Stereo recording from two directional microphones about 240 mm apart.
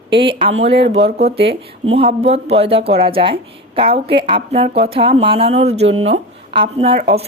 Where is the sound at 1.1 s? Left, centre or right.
Right.